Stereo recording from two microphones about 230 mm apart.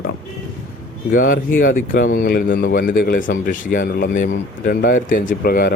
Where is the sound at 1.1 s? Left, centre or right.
Left.